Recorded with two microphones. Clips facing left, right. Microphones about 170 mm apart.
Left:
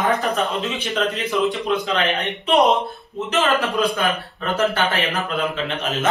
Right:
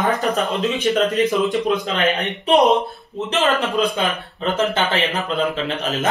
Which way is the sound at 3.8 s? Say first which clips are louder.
Even; 20° right (ahead or behind).